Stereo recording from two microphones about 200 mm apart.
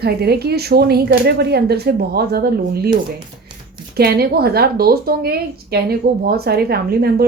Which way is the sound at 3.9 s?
50° right (ahead or behind).